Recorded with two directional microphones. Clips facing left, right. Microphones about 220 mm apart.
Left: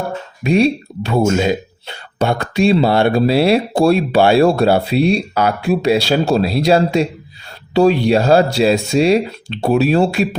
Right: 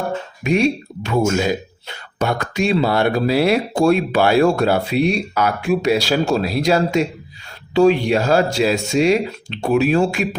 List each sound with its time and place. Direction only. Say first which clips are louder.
0.4 s speech: left 3 dB; 35° left (ahead or behind)